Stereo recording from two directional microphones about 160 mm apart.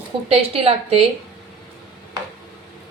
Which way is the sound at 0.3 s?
40° right (ahead or behind).